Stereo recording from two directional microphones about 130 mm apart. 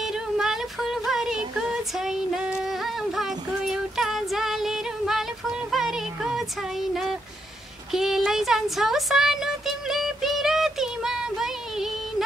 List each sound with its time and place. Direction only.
0.0 s music: 5° right (ahead or behind)
2.0 s female singing: 5° right (ahead or behind)
7.9 s a sound: 5° right (ahead or behind)